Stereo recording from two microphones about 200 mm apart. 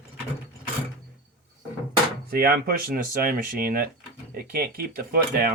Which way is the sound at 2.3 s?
50° right (ahead or behind).